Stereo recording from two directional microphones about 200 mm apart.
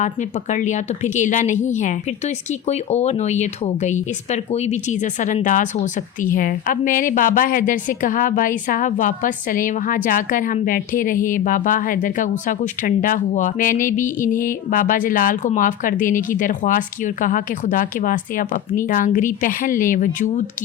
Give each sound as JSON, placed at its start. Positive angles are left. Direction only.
{"t": 0.0, "sound": "a woman's voice", "side_deg": 35}